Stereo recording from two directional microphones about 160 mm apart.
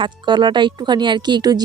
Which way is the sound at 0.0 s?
30° right (ahead or behind).